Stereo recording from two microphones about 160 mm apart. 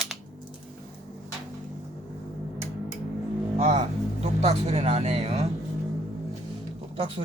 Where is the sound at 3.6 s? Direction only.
45° right (ahead or behind).